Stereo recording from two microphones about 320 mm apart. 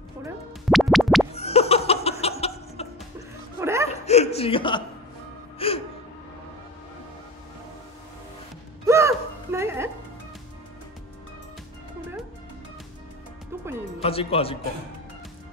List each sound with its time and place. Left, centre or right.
0.7 s music: centre
1.3 s a sound: centre
3.5 s whimper: centre
3.9 s chuckle: centre
5.6 s music: centre
8.8 s music: centre
13.7 s music: centre
14.0 s speech: centre